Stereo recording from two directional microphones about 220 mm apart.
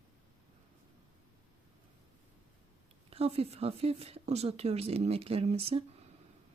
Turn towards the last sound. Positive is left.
turn(degrees=-25)  # may be behind; listen again after turning